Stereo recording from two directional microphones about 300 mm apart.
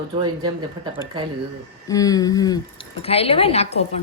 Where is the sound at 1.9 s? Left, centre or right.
Centre.